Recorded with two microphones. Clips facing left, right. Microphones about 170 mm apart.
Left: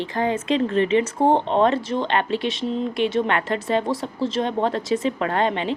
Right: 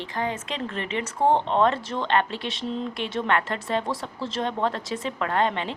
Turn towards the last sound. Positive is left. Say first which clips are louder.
# left 3 dB
turn(degrees=20)  # may be behind; listen again after turning